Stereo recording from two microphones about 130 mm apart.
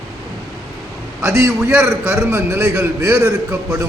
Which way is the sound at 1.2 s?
20° right (ahead or behind).